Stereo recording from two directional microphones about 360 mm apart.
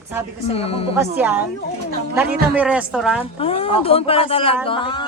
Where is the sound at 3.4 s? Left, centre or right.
Centre.